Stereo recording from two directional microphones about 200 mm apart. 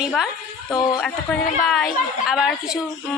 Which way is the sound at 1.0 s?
5° left (ahead or behind).